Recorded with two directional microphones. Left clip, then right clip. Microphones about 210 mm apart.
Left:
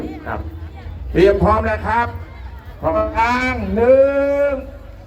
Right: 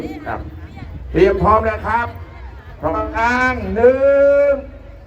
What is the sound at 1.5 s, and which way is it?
Speech, 25° left (ahead or behind).